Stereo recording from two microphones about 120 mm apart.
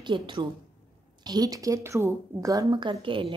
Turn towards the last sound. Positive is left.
turn(degrees=-45)  # may be behind; listen again after turning